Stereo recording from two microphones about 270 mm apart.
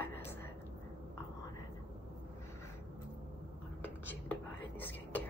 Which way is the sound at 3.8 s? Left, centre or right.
Centre.